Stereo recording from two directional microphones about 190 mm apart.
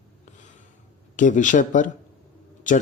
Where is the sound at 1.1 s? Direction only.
40° left (ahead or behind).